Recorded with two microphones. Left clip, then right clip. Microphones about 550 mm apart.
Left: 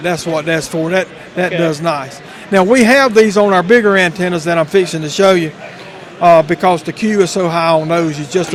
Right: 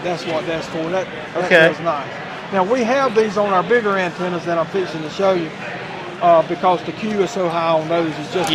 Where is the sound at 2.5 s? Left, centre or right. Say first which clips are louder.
Left 8 dB; left.